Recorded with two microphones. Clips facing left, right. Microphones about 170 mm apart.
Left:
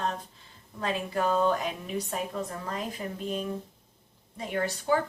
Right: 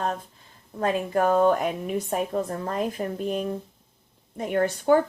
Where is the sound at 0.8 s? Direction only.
50° right (ahead or behind).